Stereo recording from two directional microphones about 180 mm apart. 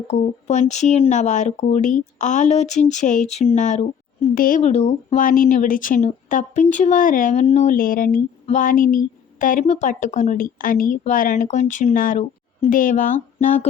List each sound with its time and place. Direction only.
0.1 s speech: 40° left (ahead or behind)